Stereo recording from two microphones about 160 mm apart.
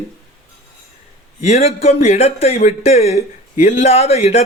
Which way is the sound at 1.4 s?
40° left (ahead or behind).